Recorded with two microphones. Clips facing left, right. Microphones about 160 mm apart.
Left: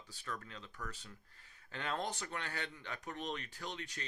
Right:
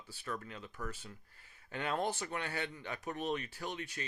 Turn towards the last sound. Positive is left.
turn(degrees=-10)  # may be behind; listen again after turning